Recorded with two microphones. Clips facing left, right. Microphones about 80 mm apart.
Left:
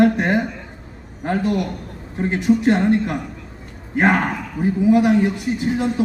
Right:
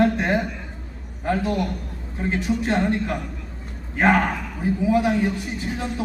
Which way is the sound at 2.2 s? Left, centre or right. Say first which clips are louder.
Left 6 dB; left.